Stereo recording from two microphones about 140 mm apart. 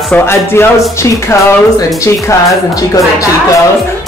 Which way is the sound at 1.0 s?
20° left (ahead or behind).